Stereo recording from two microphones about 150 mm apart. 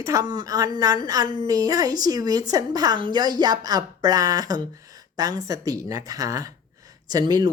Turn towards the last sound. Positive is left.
turn(degrees=-25)  # may be behind; listen again after turning